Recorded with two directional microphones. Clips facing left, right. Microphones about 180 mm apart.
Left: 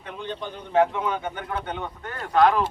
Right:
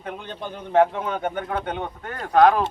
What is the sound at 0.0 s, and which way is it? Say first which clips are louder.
A man's voice: even; 45° right (ahead or behind).